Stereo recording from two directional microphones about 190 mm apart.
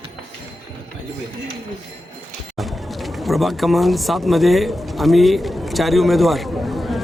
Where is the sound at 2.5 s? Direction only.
Centre (ahead or behind).